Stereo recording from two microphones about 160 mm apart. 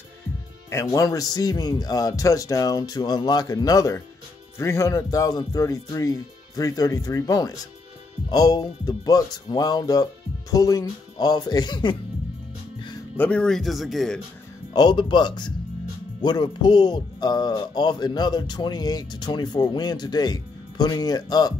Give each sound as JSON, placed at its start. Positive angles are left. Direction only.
{"t": 0.7, "sound": "speech", "side_deg": 20}
{"t": 13.2, "sound": "speech", "side_deg": 5}
{"t": 14.7, "sound": "speech", "side_deg": 25}